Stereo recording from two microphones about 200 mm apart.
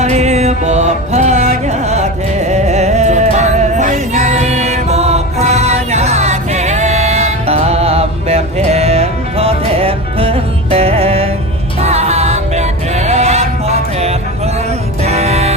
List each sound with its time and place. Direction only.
0.0 s music: 35° right (ahead or behind)